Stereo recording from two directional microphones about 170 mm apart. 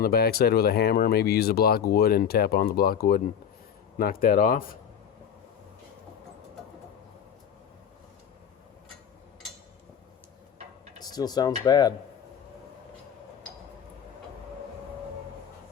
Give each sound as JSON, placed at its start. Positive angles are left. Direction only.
{"t": 0.0, "sound": "speech", "side_deg": 65}
{"t": 11.0, "sound": "speech", "side_deg": 25}